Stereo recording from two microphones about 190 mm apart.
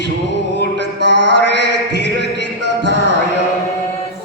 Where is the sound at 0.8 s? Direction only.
65° right (ahead or behind).